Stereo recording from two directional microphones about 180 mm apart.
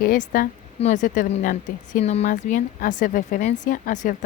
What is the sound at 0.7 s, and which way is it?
Speech, 40° left (ahead or behind).